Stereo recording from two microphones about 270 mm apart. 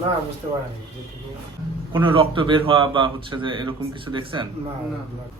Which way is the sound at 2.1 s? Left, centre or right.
Centre.